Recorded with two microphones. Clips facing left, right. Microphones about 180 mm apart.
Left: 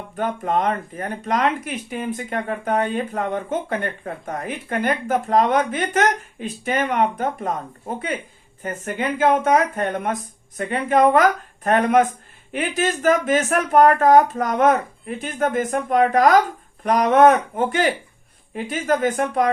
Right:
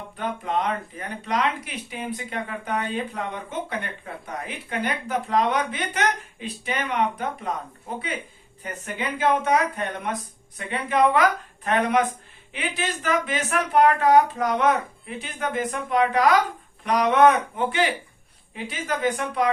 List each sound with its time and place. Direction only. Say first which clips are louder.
0.2 s speech: left 5 dB; 50° left (ahead or behind)